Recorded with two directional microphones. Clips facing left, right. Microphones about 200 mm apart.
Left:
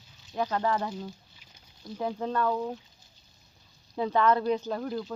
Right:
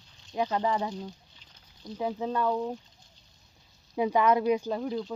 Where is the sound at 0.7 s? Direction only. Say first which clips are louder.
Even; centre (ahead or behind).